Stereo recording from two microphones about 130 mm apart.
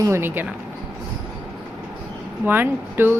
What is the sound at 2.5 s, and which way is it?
Speech, 15° right (ahead or behind).